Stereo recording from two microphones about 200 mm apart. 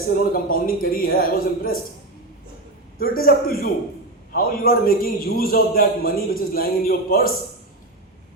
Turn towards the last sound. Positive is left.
turn(degrees=45)  # may be behind; listen again after turning